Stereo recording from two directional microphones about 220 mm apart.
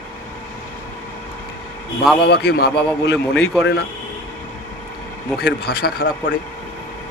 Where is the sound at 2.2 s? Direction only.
45° left (ahead or behind).